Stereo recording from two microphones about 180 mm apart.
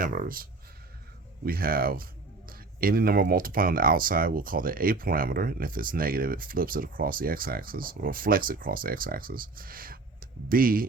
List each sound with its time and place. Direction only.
0.0 s speech: 50° right (ahead or behind)
1.5 s speech: 55° right (ahead or behind)